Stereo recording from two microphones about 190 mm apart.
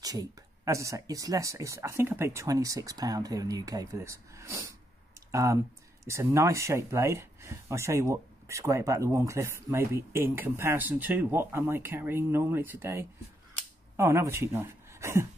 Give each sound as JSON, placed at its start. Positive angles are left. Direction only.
{"t": 0.0, "sound": "speech", "side_deg": -20}